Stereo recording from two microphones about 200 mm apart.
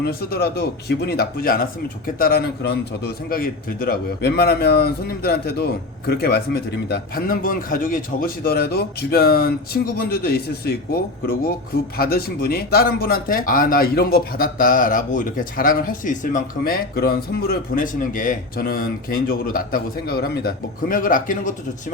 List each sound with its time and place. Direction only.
0.0 s a man's voice: 50° left (ahead or behind)